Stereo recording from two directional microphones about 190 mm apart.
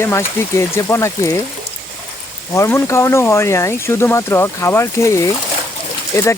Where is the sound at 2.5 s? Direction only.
15° left (ahead or behind).